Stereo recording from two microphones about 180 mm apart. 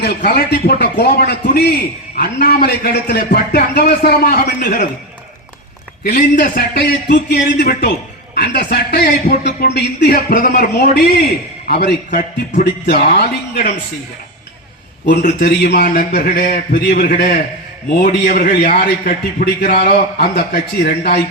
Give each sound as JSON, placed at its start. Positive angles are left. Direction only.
{"t": 0.3, "sound": "a man's voice", "side_deg": 60}
{"t": 6.1, "sound": "a man's voice", "side_deg": 50}
{"t": 9.3, "sound": "a man's voice", "side_deg": 50}
{"t": 9.7, "sound": "a man's voice", "side_deg": 65}
{"t": 15.4, "sound": "a man's voice", "side_deg": 65}
{"t": 19.8, "sound": "a man's voice", "side_deg": 60}